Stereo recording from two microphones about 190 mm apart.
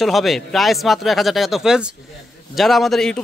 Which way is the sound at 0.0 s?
Centre (ahead or behind).